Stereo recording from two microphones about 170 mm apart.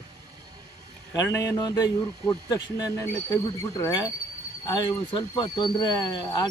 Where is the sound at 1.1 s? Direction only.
20° left (ahead or behind).